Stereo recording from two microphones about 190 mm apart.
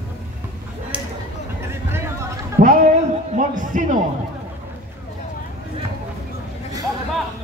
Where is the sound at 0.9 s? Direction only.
5° right (ahead or behind).